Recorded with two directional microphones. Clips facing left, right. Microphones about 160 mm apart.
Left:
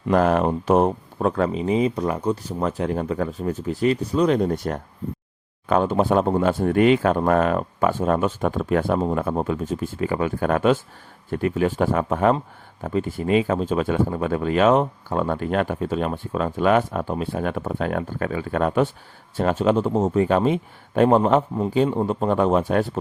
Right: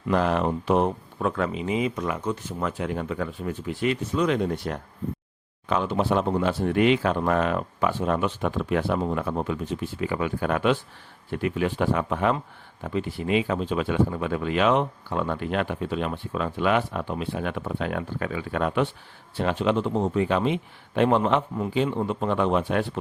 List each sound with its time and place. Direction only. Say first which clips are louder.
0.1 s speech: left 4 dB; 45° left (ahead or behind)